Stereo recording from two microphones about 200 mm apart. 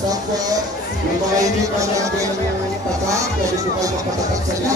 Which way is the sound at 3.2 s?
15° right (ahead or behind).